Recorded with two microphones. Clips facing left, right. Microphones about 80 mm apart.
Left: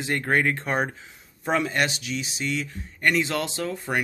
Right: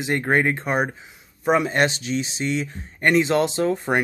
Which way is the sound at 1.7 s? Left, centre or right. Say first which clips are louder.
Right 5 dB; right.